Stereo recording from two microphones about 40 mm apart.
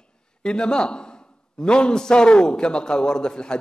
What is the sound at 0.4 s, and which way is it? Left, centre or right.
A man's voice, left.